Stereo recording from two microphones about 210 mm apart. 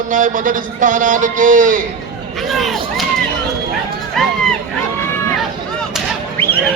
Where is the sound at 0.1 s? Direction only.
40° right (ahead or behind).